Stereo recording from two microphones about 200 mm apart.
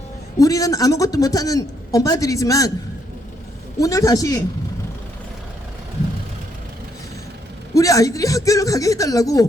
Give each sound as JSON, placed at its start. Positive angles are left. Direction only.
{"t": 0.3, "sound": "speech", "side_deg": 15}
{"t": 3.8, "sound": "speech", "side_deg": 15}
{"t": 7.7, "sound": "speech", "side_deg": 15}